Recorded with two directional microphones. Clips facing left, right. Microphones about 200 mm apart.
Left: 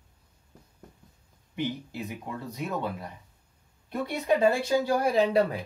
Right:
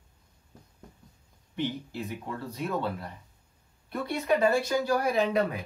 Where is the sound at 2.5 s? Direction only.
15° left (ahead or behind).